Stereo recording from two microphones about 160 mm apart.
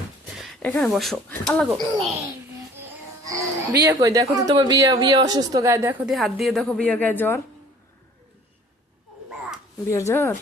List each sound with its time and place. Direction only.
0.6 s a woman's voice: 5° left (ahead or behind)
3.2 s speech: 20° right (ahead or behind)
6.1 s a woman's voice: centre (ahead or behind)
9.9 s speech: 20° left (ahead or behind)